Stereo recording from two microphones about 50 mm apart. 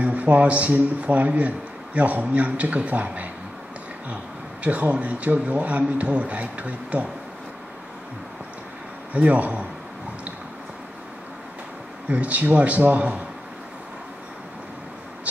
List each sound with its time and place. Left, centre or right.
0.0 s a man's voice: right
4.6 s a man's voice: right
9.1 s a man's voice: right
12.1 s a man's voice: right